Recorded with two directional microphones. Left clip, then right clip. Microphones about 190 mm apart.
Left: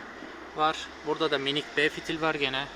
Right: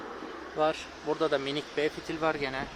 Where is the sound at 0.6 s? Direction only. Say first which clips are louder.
Left 1 dB; 5° left (ahead or behind).